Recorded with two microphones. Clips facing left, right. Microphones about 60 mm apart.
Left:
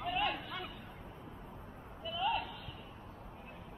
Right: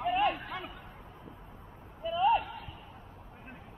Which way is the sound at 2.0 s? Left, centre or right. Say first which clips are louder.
Right 9 dB; right.